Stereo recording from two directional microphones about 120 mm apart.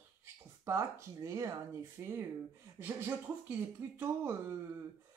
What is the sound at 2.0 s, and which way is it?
Speech, 15° right (ahead or behind).